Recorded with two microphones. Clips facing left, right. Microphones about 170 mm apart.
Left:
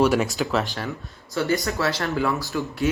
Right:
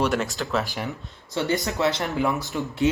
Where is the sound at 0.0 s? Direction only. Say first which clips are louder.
Left 4 dB; 5° left (ahead or behind).